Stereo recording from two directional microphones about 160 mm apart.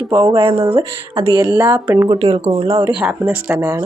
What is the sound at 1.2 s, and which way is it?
Speech, 20° right (ahead or behind).